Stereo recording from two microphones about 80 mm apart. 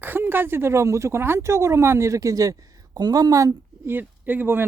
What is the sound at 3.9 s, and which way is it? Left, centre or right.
Speech, right.